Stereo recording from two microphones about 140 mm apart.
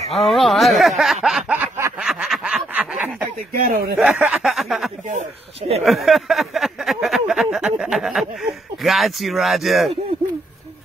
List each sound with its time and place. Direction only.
0.1 s speech: centre (ahead or behind)
1.5 s a sound: 15° right (ahead or behind)
2.0 s snicker: 5° right (ahead or behind)
3.9 s speech: 10° right (ahead or behind)
5.1 s speech: 45° right (ahead or behind)
5.9 s a sound: centre (ahead or behind)